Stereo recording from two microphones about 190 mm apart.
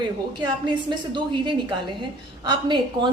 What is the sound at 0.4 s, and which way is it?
A woman's voice, 25° right (ahead or behind).